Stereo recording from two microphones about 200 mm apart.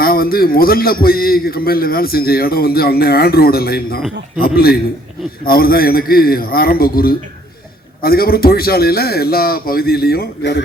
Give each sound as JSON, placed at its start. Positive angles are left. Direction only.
{"t": 0.0, "sound": "a man's voice", "side_deg": 50}